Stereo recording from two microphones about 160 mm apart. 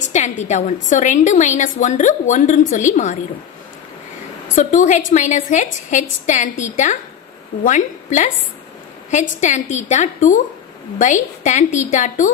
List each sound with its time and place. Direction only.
0.0 s a woman's voice: 45° left (ahead or behind)
4.6 s a woman's voice: 50° left (ahead or behind)
7.6 s a woman's voice: 50° left (ahead or behind)